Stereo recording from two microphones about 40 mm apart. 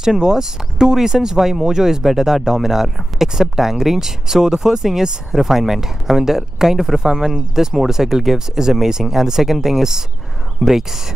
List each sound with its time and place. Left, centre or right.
0.0 s speech: centre